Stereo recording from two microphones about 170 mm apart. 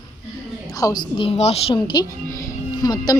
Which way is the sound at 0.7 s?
25° left (ahead or behind).